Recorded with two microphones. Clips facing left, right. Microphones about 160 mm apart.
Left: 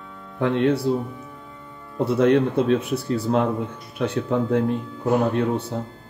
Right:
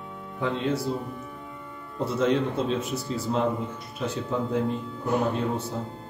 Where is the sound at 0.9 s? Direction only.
65° left (ahead or behind).